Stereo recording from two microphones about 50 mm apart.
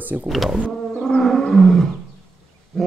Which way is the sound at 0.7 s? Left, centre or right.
Centre.